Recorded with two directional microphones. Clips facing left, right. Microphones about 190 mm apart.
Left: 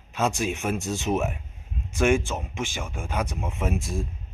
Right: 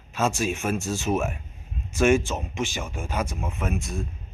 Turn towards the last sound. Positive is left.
turn(degrees=30)  # may be behind; listen again after turning